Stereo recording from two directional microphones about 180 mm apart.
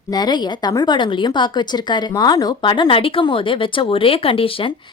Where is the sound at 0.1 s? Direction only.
25° left (ahead or behind).